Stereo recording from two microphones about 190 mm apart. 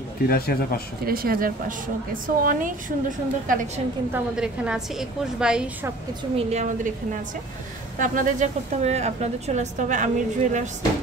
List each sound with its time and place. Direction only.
0.3 s speech: 50° left (ahead or behind)
1.0 s a woman's voice: 50° right (ahead or behind)
4.1 s a woman's voice: 5° right (ahead or behind)
6.3 s a woman's voice: 40° right (ahead or behind)